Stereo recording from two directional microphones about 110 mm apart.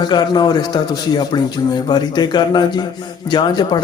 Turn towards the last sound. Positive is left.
turn(degrees=45)  # may be behind; listen again after turning